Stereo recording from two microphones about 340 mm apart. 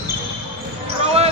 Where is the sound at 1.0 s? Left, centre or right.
Centre.